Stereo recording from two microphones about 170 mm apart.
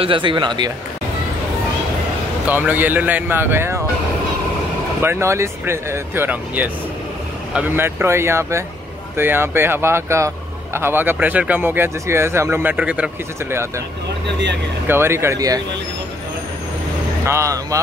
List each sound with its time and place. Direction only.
0.0 s speech: 30° right (ahead or behind)
2.4 s speech: 10° right (ahead or behind)
5.0 s speech: 15° right (ahead or behind)
14.9 s speech: 15° right (ahead or behind)
17.3 s speech: 20° right (ahead or behind)